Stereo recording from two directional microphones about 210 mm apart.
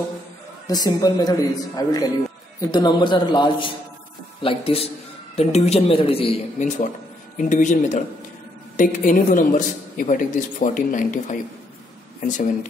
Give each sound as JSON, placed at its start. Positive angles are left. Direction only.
{"t": 0.7, "sound": "a man's voice", "side_deg": 20}